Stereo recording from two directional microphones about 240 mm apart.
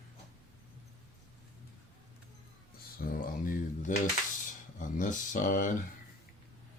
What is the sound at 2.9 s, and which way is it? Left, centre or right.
Speech, left.